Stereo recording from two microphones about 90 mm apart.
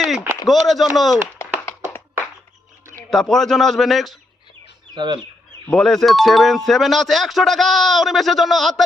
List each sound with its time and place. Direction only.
0.4 s speech: centre (ahead or behind)
1.4 s clapping: 25° left (ahead or behind)
3.1 s speech: 5° left (ahead or behind)
4.9 s speech: 60° right (ahead or behind)
5.7 s speech: 5° left (ahead or behind)